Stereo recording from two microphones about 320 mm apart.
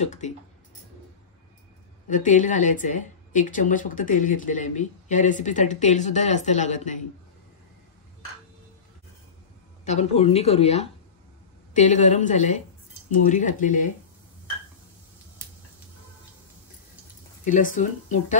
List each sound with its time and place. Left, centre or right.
0.0 s speech: left
2.0 s speech: left
9.8 s speech: centre
17.5 s speech: left